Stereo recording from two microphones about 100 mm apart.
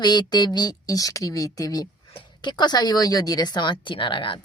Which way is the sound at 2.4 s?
50° left (ahead or behind).